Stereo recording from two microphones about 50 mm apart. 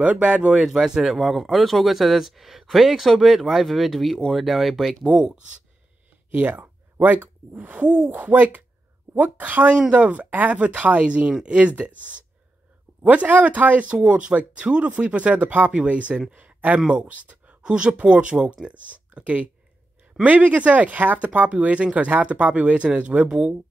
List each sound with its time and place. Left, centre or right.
0.0 s speech: right
0.7 s speech: centre
6.3 s speech: right
13.0 s speech: right
16.8 s speech: right
17.6 s speech: centre